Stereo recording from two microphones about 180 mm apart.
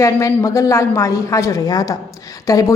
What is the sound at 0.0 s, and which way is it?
A woman's voice, 15° left (ahead or behind).